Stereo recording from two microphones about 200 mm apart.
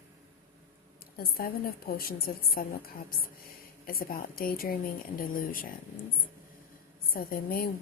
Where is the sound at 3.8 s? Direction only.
45° left (ahead or behind).